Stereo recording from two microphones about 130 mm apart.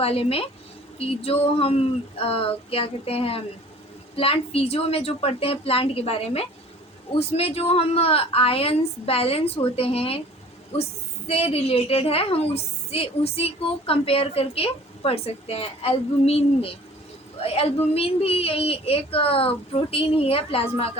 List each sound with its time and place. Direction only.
0.0 s a woman's voice: 50° left (ahead or behind)
11.3 s a woman's voice: 50° left (ahead or behind)